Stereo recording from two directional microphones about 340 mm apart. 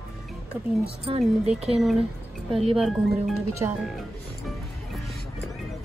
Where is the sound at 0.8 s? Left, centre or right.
Centre.